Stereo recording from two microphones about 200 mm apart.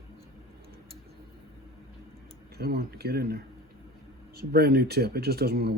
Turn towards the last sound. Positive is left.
turn(degrees=-55)  # may be behind; listen again after turning